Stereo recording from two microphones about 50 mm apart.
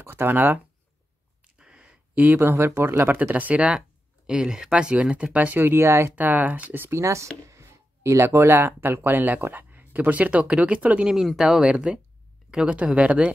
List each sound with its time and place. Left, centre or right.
0.0 s speech: right
1.6 s a sound: centre
2.1 s speech: right
2.5 s speech: right
3.2 s speech: right
4.3 s speech: centre; by 5.6 s right
5.6 s speech: right
6.1 s speech: right
6.9 s speech: right
7.4 s a sound: right
8.5 s speech: right
11.1 s speech: centre
11.6 s speech: right